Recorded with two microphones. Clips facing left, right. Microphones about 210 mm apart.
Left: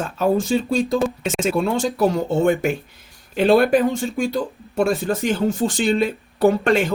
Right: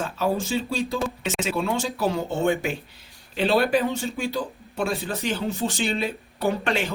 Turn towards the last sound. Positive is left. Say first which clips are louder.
# left 8 dB
turn(degrees=45)  # may be behind; listen again after turning